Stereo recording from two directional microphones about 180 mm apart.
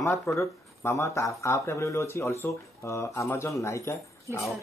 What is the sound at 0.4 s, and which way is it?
Speech, 15° left (ahead or behind).